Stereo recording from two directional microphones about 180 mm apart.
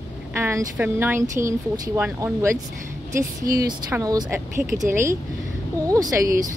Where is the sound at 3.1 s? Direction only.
55° right (ahead or behind).